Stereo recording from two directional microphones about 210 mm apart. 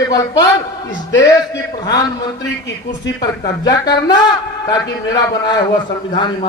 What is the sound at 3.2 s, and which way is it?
A man's voice, 20° left (ahead or behind).